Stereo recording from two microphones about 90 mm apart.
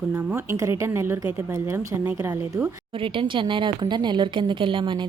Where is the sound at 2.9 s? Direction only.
75° right (ahead or behind).